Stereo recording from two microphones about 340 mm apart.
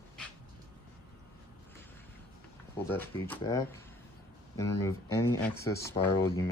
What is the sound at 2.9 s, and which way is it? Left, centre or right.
Speech, centre.